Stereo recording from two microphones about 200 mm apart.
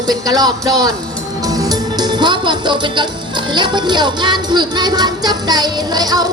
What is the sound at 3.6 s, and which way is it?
Speech, 20° right (ahead or behind).